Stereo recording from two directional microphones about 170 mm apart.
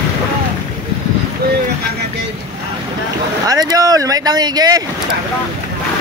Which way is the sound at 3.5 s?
20° right (ahead or behind).